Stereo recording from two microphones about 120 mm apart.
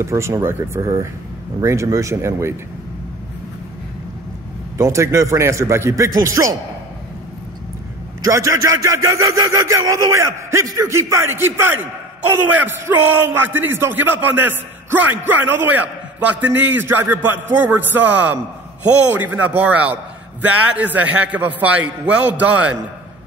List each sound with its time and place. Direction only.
0.0 s a man's voice: 25° right (ahead or behind)
4.7 s a man's voice: 25° right (ahead or behind)
8.2 s speech: 25° right (ahead or behind)